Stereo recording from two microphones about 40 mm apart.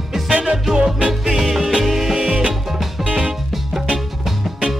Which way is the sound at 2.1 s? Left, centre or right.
Right.